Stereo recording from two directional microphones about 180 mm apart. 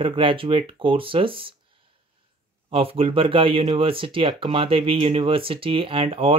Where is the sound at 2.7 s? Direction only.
30° right (ahead or behind).